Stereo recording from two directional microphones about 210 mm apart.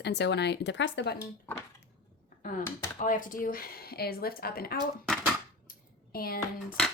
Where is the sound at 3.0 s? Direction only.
40° left (ahead or behind).